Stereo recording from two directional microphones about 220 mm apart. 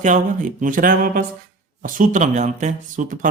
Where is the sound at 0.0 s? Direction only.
35° right (ahead or behind).